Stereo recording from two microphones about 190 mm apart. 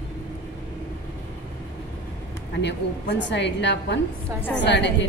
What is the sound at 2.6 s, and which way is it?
A woman's voice, 65° left (ahead or behind).